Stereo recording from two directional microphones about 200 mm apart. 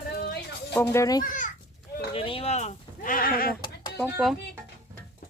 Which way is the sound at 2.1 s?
25° left (ahead or behind).